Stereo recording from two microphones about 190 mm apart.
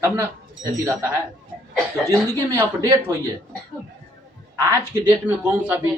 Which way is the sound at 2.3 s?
15° right (ahead or behind).